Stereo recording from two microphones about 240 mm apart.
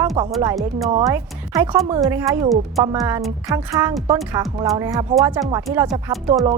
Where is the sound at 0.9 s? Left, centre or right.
Right.